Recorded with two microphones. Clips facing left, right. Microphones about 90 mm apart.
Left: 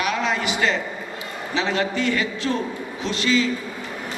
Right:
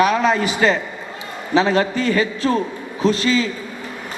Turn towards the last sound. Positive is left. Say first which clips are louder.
# right 4 dB
turn(degrees=-40)  # may be behind; listen again after turning